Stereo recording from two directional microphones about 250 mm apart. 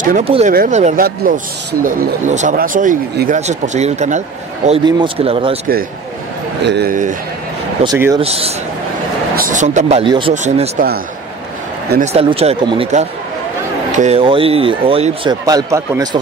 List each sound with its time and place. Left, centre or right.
0.0 s speech: right
6.6 s speech: right
7.8 s speech: centre; by 11.0 s right
12.0 s speech: right